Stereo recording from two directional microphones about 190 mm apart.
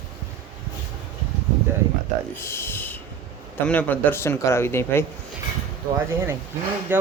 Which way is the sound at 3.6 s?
10° left (ahead or behind).